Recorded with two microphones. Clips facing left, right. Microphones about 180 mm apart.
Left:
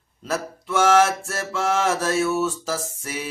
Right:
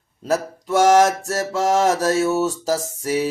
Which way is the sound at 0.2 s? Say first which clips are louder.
Right 6 dB; 40° right (ahead or behind).